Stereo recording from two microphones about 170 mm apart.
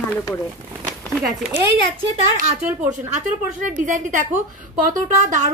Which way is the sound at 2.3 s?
45° right (ahead or behind).